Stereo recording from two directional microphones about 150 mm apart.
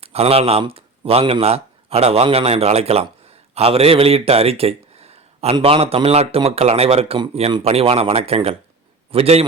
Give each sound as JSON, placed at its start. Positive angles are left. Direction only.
{"t": 0.0, "sound": "speech", "side_deg": -40}